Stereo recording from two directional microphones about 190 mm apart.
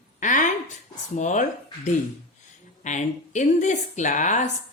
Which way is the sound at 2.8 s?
40° left (ahead or behind).